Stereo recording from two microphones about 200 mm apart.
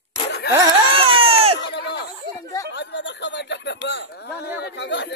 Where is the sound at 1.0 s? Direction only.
30° right (ahead or behind).